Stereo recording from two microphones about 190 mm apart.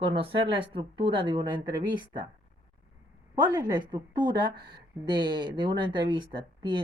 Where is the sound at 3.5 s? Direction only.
20° right (ahead or behind).